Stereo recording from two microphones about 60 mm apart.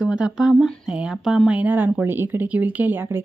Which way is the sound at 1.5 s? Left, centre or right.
Right.